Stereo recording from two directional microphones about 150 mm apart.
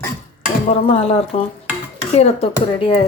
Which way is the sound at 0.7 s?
45° left (ahead or behind).